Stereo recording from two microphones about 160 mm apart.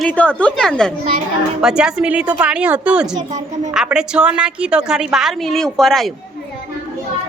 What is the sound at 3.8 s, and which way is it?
A child's voice, 5° right (ahead or behind).